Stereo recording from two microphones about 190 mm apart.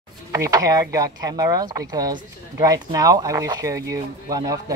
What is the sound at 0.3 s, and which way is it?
Speech, 15° right (ahead or behind).